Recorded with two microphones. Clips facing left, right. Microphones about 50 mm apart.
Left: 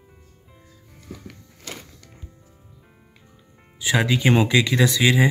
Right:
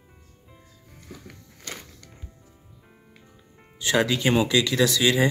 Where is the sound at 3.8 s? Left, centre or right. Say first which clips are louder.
Left 1 dB; centre.